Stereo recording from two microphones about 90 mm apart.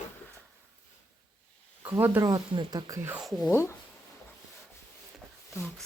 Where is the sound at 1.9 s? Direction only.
25° right (ahead or behind).